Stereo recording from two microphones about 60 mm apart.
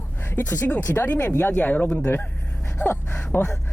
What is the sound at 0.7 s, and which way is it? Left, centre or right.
Speech, left.